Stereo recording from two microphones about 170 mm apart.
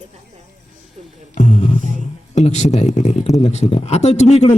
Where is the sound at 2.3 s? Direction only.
40° left (ahead or behind).